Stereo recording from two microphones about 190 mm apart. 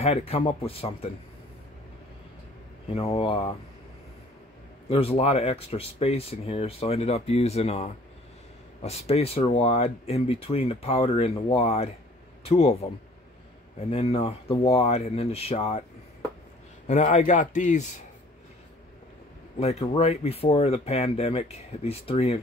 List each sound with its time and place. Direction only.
0.0 s speech: 35° left (ahead or behind)
2.9 s speech: 30° left (ahead or behind)
4.8 s speech: 30° left (ahead or behind)
13.7 s speech: 35° left (ahead or behind)
16.8 s speech: 40° left (ahead or behind)
20.0 s speech: 30° left (ahead or behind)